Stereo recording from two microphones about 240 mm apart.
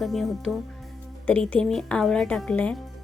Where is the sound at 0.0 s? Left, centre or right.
Centre.